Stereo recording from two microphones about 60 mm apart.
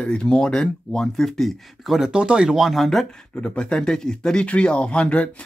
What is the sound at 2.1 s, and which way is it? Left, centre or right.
Speech, centre.